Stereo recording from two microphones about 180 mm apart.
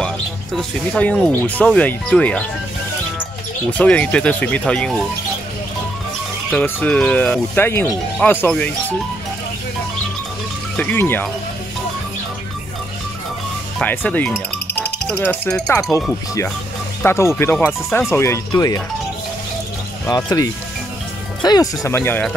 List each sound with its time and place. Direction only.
0.6 s speech: 5° left (ahead or behind)
3.7 s speech: 5° left (ahead or behind)
6.5 s speech: 10° left (ahead or behind)
10.8 s speech: 10° left (ahead or behind)
13.7 s speech: 10° left (ahead or behind)
15.7 s speech: 20° left (ahead or behind)
17.0 s speech: 15° left (ahead or behind)
20.1 s speech: 20° left (ahead or behind)